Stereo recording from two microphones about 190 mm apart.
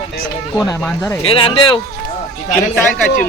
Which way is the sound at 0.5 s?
15° left (ahead or behind).